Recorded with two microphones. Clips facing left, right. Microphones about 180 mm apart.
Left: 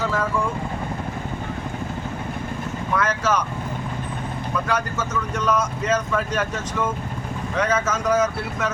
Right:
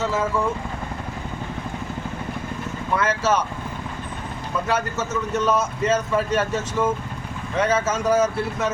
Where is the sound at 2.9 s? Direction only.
25° right (ahead or behind).